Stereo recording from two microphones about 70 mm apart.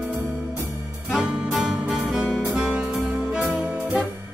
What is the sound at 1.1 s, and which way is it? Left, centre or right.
Music, centre.